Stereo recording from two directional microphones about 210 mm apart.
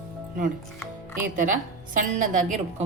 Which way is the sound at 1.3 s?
40° right (ahead or behind).